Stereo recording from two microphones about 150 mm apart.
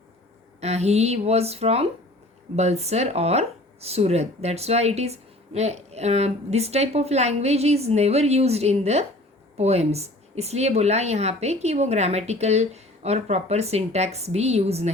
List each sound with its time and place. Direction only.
0.6 s speech: 45° right (ahead or behind)